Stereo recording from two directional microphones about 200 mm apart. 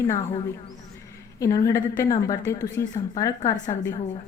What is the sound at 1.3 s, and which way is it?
A woman's voice, 15° left (ahead or behind).